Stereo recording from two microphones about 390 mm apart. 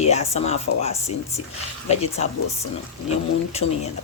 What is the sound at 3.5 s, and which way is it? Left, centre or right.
Speech, centre.